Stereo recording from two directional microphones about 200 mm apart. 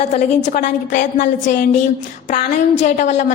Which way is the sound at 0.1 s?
40° left (ahead or behind).